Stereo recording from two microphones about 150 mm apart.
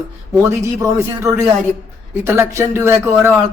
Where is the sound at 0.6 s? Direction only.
20° right (ahead or behind).